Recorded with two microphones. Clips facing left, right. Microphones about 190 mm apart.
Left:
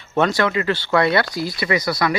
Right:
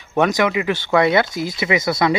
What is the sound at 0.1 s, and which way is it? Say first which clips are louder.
A man's voice: right 1 dB; 15° right (ahead or behind).